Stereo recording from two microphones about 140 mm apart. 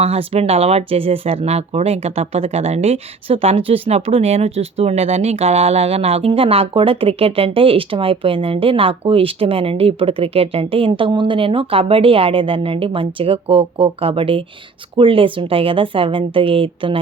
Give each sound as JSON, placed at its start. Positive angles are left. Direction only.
{"t": 0.0, "sound": "a woman's voice", "side_deg": -45}